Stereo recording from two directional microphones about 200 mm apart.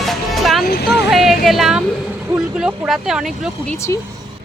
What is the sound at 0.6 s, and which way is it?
Vehicle, 50° left (ahead or behind).